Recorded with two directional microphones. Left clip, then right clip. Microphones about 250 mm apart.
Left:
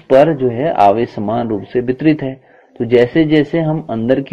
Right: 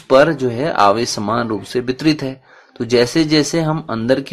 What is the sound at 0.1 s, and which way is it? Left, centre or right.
Speech, centre.